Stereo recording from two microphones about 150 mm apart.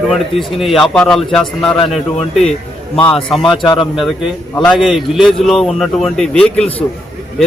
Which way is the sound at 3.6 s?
35° left (ahead or behind).